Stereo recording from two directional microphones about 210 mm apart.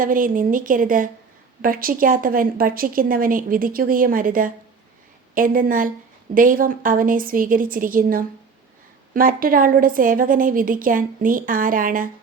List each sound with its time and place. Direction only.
0.0 s a woman's voice: 40° right (ahead or behind)